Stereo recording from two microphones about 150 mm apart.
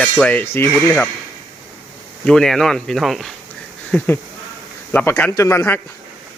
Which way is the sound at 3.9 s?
15° left (ahead or behind).